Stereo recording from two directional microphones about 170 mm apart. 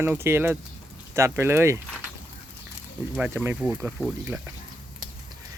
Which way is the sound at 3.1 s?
5° right (ahead or behind).